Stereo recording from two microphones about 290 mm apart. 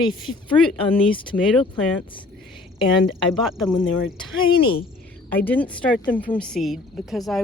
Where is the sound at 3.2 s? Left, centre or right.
Centre.